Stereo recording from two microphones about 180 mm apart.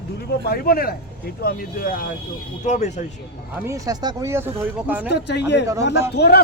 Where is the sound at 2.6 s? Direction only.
40° left (ahead or behind).